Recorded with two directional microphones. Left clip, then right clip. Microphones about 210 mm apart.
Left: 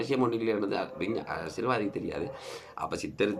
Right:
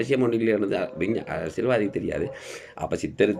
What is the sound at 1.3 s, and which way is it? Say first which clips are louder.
Speech: right 7 dB; 50° left (ahead or behind).